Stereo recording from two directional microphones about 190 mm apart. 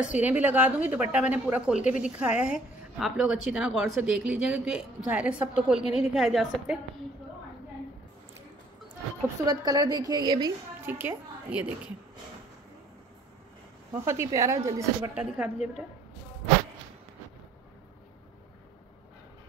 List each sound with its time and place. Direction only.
0.0 s a woman's voice: 5° right (ahead or behind)
9.5 s a woman's voice: 20° right (ahead or behind)
10.9 s a woman's voice: 10° right (ahead or behind)
14.0 s a woman's voice: 15° right (ahead or behind)